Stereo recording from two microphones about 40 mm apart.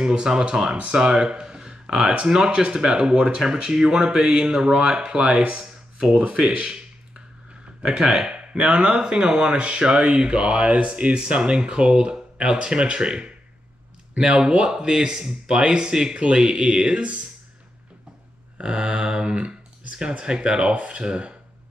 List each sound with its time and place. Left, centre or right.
0.0 s speech: right
5.6 s a sound: centre
6.1 s speech: right
6.4 s a sound: centre
7.8 s speech: centre
8.5 s speech: right
18.6 s speech: right